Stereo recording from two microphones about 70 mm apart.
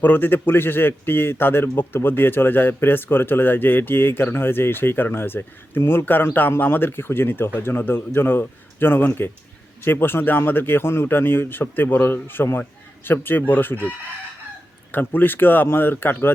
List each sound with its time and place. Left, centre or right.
0.0 s a man's voice: left
14.9 s speech: left